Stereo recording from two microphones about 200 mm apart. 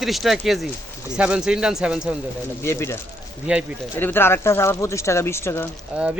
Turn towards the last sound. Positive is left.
turn(degrees=-5)  # may be behind; listen again after turning